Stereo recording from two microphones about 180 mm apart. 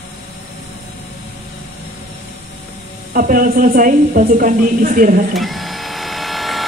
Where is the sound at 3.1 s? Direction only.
50° right (ahead or behind).